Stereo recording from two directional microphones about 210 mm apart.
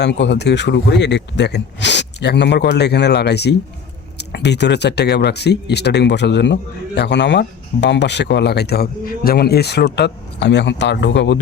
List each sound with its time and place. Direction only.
0.0 s speech: 55° left (ahead or behind)